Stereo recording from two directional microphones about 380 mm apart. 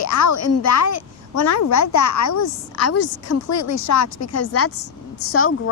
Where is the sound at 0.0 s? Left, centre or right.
Left.